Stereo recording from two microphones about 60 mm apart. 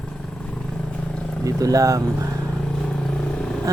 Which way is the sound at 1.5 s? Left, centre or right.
Right.